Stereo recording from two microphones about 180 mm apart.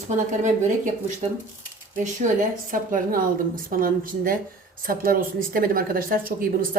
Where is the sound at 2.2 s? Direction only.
45° right (ahead or behind).